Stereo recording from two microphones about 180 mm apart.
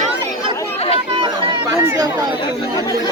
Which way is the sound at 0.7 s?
35° left (ahead or behind).